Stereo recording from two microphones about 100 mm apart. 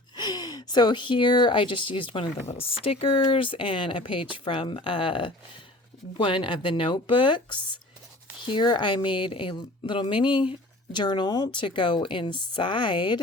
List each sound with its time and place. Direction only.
0.2 s speech: 45° left (ahead or behind)
2.5 s a woman's voice: 70° left (ahead or behind)